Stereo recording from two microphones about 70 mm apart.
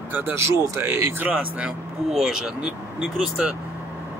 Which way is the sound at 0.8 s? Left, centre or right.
Right.